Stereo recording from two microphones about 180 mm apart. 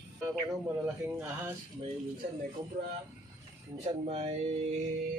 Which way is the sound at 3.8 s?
35° right (ahead or behind).